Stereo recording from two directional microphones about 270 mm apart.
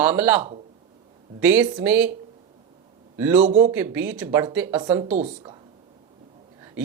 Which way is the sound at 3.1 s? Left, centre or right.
Centre.